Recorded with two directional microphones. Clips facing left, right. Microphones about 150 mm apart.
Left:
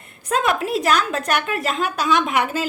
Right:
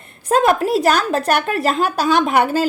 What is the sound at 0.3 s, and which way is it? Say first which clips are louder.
A woman's voice: right 6 dB; 40° right (ahead or behind).